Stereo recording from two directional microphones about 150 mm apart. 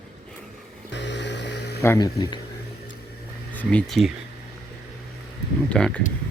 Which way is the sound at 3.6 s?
10° left (ahead or behind).